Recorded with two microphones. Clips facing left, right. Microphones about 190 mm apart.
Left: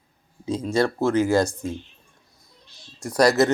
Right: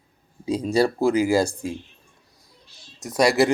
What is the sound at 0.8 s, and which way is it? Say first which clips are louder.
Speech: even; 10° right (ahead or behind).